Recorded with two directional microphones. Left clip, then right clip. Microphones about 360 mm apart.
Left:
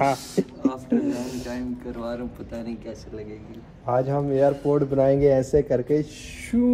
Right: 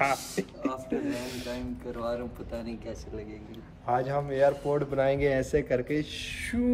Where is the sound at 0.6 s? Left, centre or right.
Centre.